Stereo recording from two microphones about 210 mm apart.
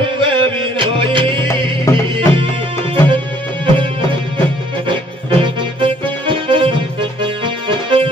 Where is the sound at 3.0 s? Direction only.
25° right (ahead or behind).